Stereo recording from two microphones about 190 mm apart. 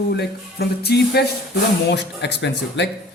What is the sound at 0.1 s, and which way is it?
Speech, 60° left (ahead or behind).